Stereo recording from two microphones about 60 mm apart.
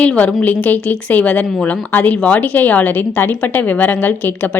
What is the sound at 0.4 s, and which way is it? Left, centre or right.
A woman's voice, left.